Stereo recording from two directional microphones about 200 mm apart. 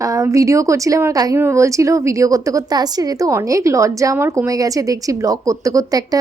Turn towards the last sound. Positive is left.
turn(degrees=-15)  # may be behind; listen again after turning